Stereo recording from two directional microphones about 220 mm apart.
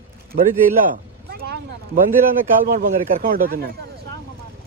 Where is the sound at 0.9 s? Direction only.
45° right (ahead or behind).